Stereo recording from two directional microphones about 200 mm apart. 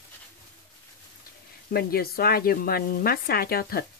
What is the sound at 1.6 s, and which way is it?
Speech, 50° left (ahead or behind).